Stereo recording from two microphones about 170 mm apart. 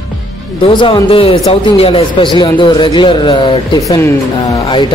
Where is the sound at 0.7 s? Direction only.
25° left (ahead or behind).